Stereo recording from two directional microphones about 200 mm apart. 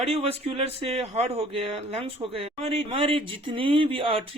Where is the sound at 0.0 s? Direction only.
30° right (ahead or behind).